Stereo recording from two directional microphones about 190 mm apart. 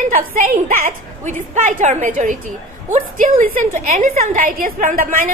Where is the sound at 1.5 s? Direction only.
40° right (ahead or behind).